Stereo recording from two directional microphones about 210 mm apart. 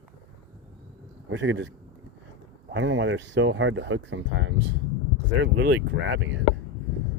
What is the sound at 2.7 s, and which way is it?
Speech, 65° right (ahead or behind).